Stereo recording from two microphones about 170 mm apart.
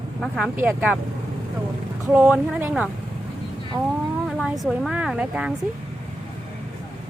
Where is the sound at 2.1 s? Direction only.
10° right (ahead or behind).